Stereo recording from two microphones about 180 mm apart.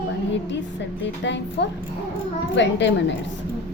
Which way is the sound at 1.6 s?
70° left (ahead or behind).